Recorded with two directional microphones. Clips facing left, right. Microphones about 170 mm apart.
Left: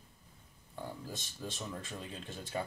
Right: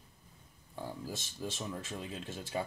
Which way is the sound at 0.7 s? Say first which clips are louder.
Right 2 dB; 10° right (ahead or behind).